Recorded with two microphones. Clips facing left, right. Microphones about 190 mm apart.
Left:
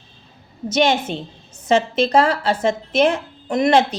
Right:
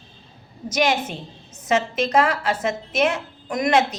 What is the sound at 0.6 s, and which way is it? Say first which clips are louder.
A woman's voice: left 4 dB; 25° left (ahead or behind).